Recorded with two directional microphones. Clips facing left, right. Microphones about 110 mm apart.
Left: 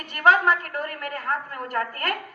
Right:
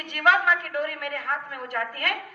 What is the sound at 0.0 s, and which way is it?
A woman's voice, 40° left (ahead or behind).